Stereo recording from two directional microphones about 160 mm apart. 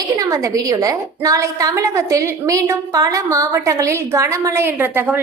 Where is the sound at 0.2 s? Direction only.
20° right (ahead or behind).